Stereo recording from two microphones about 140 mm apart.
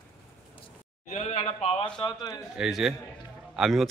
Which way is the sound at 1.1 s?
60° left (ahead or behind).